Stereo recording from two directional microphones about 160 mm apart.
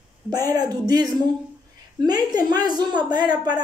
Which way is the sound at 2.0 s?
25° right (ahead or behind).